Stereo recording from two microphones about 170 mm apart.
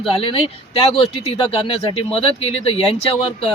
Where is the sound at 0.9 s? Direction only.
35° left (ahead or behind).